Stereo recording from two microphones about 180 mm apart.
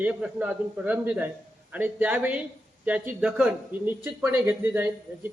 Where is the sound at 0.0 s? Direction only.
5° right (ahead or behind).